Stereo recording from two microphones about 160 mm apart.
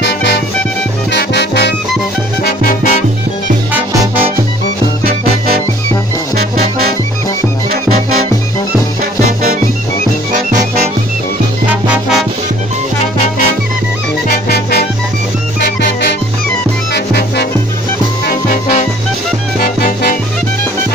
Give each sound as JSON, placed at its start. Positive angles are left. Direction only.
{"t": 0.0, "sound": "music", "side_deg": 90}
{"t": 2.4, "sound": "music", "side_deg": 60}
{"t": 6.3, "sound": "music", "side_deg": -70}
{"t": 15.6, "sound": "music", "side_deg": 90}
{"t": 18.2, "sound": "music", "side_deg": 60}
{"t": 19.6, "sound": "music", "side_deg": 65}